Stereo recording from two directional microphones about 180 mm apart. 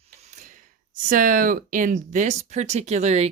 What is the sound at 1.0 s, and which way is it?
Speech, 50° right (ahead or behind).